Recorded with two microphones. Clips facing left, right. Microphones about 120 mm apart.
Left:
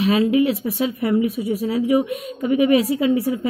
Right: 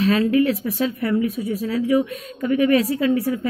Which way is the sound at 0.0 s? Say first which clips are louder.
Left 1 dB; 15° left (ahead or behind).